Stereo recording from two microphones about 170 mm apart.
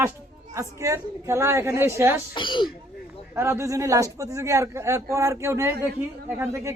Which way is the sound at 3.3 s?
15° right (ahead or behind).